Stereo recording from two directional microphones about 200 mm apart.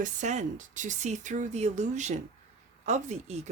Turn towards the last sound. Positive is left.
turn(degrees=-35)  # may be behind; listen again after turning